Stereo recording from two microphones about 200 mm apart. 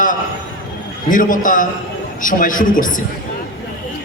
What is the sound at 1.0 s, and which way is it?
A woman's voice, 40° left (ahead or behind).